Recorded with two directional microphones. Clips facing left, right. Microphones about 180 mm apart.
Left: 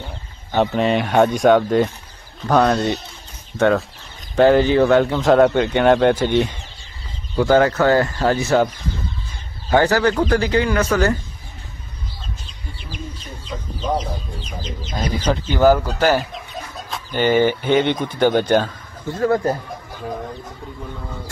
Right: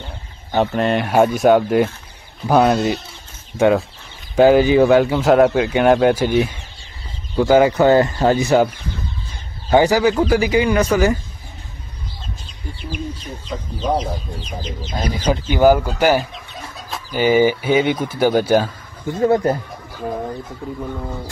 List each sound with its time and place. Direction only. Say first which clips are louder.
0.6 s speech: even; centre (ahead or behind)
15.2 s speech: right 1 dB; 10° right (ahead or behind)
19.1 s speech: right 2 dB; 20° right (ahead or behind)